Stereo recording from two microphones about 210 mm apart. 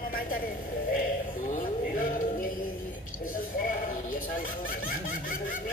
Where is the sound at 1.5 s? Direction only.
40° left (ahead or behind).